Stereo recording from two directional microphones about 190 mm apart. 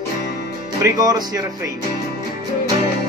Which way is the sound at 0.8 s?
20° right (ahead or behind).